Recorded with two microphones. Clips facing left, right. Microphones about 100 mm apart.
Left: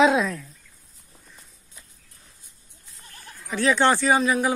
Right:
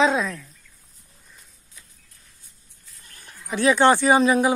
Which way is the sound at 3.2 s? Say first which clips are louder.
Right 3 dB; 20° right (ahead or behind).